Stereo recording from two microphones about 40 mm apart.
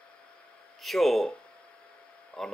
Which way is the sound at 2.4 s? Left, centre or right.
Centre.